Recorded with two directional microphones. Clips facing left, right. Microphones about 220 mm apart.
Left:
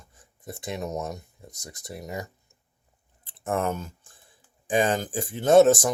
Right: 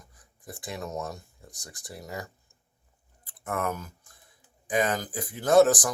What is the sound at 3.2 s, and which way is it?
Clicking, 25° left (ahead or behind).